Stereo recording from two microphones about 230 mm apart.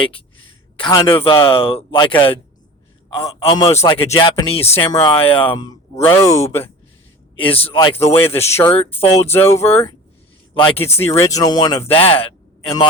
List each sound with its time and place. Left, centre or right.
0.8 s speech: centre
3.2 s speech: centre
7.3 s speech: left
7.9 s speech: centre